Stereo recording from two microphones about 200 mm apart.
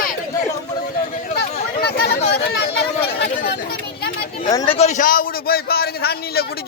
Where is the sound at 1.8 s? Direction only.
55° left (ahead or behind).